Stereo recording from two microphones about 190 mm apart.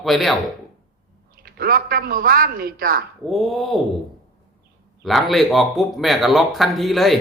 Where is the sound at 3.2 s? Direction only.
Centre (ahead or behind).